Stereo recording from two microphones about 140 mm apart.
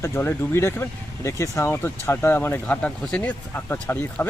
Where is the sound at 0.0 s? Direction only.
15° left (ahead or behind).